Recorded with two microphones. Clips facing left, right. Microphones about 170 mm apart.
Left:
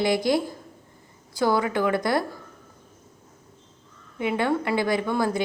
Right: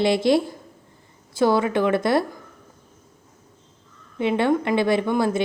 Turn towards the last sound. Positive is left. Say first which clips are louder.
# right 3 dB
turn(degrees=-20)  # may be behind; listen again after turning